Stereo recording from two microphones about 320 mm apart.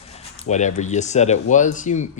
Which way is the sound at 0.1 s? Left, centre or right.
Centre.